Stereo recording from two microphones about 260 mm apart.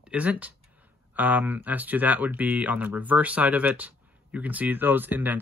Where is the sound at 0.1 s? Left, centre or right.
Centre.